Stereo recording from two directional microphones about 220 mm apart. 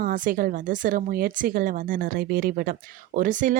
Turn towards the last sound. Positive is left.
turn(degrees=-35)  # may be behind; listen again after turning